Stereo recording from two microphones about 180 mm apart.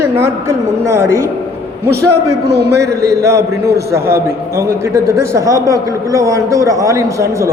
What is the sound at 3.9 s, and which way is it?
A man's voice, 15° right (ahead or behind).